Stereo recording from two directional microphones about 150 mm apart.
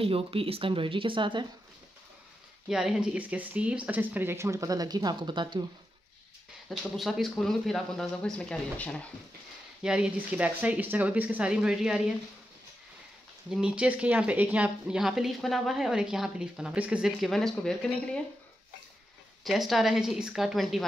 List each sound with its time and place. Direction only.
0.0 s speech: 40° right (ahead or behind)
2.7 s speech: 5° right (ahead or behind); by 5.7 s 30° right (ahead or behind)
6.7 s speech: centre (ahead or behind)
9.8 s speech: 5° right (ahead or behind)
13.5 s speech: 5° right (ahead or behind)
19.4 s speech: centre (ahead or behind)